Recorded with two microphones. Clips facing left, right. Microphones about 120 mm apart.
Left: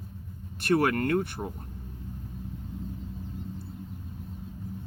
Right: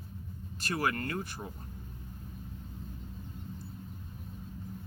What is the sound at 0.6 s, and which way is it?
Speech, 60° left (ahead or behind).